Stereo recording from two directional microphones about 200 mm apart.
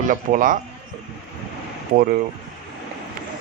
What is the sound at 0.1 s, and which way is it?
Speech, 40° right (ahead or behind).